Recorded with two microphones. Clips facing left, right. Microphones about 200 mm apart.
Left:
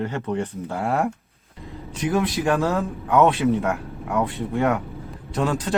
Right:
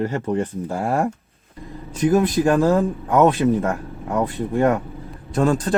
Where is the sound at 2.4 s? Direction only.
30° right (ahead or behind).